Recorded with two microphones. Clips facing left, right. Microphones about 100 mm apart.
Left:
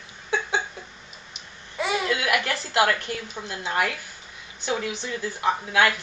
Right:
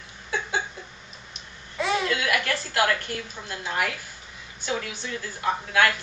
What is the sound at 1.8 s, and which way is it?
Babbling, 5° left (ahead or behind).